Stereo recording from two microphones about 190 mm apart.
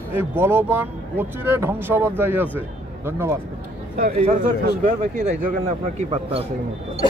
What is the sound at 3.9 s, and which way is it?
Speech, 45° right (ahead or behind).